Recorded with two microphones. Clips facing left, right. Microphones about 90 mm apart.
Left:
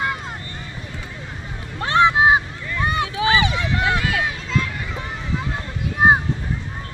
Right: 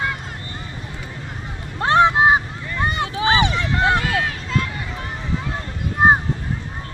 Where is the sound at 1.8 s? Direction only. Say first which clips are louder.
Right 2 dB; 40° right (ahead or behind).